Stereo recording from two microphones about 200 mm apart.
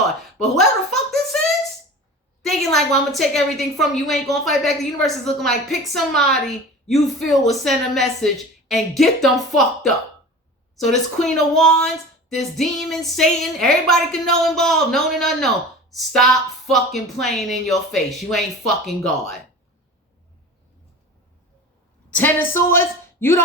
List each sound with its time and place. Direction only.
0.5 s a sound: centre (ahead or behind)
2.4 s a woman's voice: centre (ahead or behind)
22.1 s a woman's voice: 10° left (ahead or behind)